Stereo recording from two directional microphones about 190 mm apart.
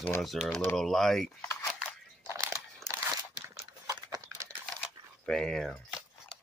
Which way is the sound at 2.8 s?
15° right (ahead or behind).